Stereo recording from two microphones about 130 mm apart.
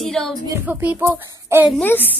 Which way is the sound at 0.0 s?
Centre (ahead or behind).